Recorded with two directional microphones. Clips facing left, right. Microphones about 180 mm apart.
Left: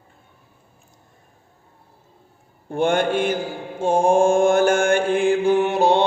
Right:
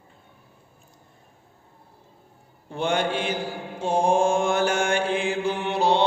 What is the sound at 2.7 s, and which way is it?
Mantra, 50° left (ahead or behind).